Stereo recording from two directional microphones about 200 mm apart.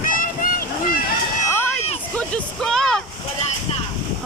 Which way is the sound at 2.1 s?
5° left (ahead or behind).